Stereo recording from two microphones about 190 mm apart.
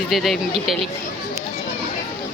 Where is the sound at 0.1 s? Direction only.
Centre (ahead or behind).